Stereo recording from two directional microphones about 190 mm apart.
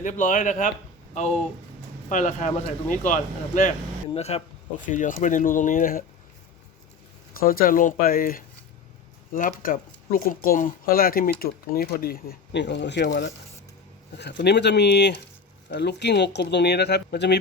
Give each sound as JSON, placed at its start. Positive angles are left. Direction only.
{"t": 0.0, "sound": "speech", "side_deg": 40}
{"t": 2.0, "sound": "speech", "side_deg": 40}
{"t": 7.3, "sound": "speech", "side_deg": 50}
{"t": 14.2, "sound": "speech", "side_deg": 60}